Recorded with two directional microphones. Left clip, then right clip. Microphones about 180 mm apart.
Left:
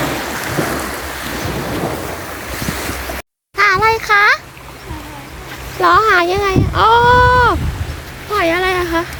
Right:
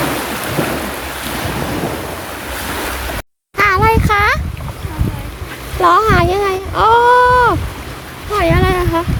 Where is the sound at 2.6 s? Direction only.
55° right (ahead or behind).